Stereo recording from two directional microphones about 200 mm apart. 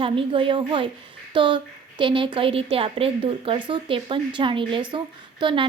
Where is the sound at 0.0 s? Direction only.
25° right (ahead or behind).